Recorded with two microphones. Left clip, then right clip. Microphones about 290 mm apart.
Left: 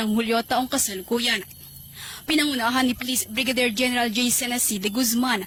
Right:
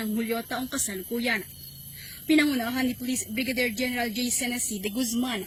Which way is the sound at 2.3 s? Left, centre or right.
Left.